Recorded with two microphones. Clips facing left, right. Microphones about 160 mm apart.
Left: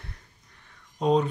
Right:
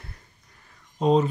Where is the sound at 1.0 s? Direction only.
Centre (ahead or behind).